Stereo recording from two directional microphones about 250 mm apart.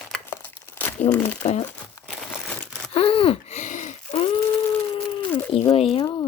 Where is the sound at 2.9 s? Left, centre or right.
Left.